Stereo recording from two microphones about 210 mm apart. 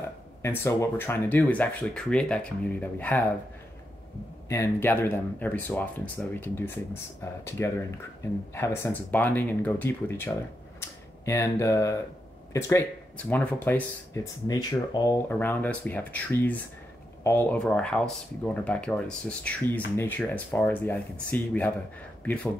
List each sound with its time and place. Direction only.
0.4 s speech: 10° left (ahead or behind)
4.5 s speech: 10° left (ahead or behind)
15.2 s speech: 10° left (ahead or behind)